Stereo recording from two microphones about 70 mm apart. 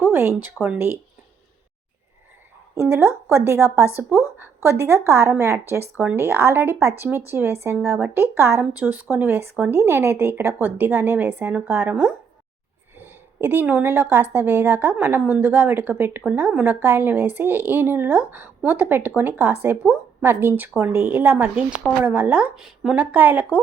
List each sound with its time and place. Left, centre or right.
0.0 s speech: right
0.6 s speech: centre
2.9 s speech: right
8.7 s a woman's voice: right
9.7 s a woman's voice: right; by 12.1 s centre
13.0 s a woman's voice: right
22.5 s speech: centre
23.0 s a woman's voice: right